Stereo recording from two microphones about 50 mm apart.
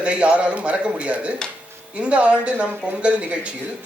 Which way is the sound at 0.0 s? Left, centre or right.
Right.